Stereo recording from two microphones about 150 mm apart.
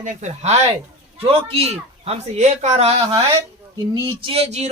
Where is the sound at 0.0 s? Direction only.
55° right (ahead or behind).